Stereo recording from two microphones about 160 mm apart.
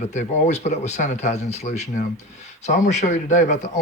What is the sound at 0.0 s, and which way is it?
Speech, 50° left (ahead or behind).